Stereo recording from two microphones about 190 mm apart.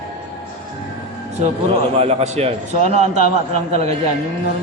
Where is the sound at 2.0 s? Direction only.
35° right (ahead or behind).